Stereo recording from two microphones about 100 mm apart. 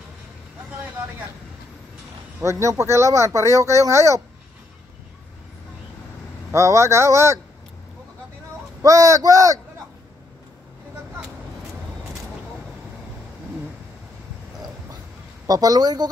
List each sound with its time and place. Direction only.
2.4 s speech: 30° right (ahead or behind)
6.5 s speech: 30° right (ahead or behind)
8.8 s speech: 35° right (ahead or behind)
15.4 s speech: 40° right (ahead or behind)